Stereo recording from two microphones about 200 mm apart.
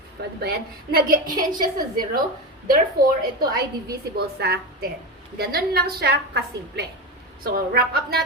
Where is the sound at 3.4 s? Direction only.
50° right (ahead or behind).